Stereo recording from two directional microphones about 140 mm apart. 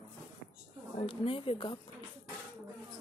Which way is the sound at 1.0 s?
40° left (ahead or behind).